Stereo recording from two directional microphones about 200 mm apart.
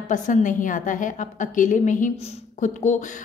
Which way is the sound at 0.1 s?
40° left (ahead or behind).